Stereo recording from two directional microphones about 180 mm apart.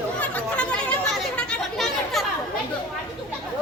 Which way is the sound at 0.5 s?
5° left (ahead or behind).